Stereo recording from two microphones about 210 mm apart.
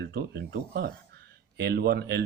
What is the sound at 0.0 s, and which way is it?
Speech, 50° right (ahead or behind).